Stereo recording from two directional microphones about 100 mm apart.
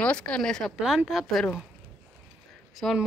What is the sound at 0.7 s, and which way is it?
Speech, 5° right (ahead or behind).